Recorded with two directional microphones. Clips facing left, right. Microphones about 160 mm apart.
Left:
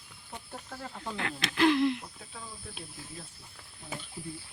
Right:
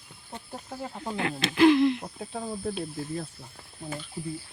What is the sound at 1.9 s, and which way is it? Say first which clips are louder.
Speech: right 10 dB; 45° right (ahead or behind).